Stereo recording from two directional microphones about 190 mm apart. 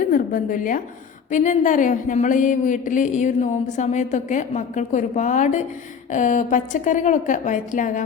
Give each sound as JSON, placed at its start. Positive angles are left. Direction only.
{"t": 0.0, "sound": "a woman's voice", "side_deg": 45}